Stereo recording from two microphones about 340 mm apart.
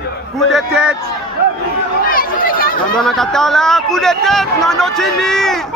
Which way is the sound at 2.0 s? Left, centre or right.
Left.